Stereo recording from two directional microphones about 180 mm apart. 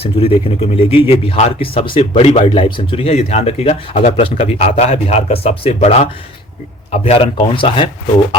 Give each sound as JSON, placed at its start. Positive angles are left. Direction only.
{"t": 0.0, "sound": "speech", "side_deg": 30}